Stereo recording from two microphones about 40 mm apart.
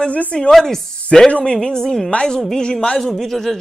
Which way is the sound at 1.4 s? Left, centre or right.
Left.